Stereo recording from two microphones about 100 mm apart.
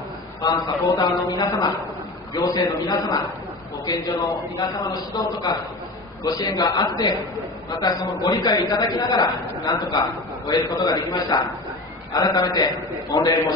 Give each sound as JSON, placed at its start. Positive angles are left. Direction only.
{"t": 0.4, "sound": "a man's voice", "side_deg": 45}